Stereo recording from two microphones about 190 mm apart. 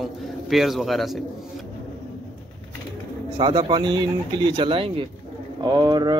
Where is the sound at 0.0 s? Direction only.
Centre (ahead or behind).